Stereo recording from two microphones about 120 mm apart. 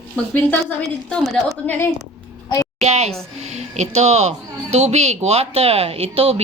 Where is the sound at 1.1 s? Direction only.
Centre (ahead or behind).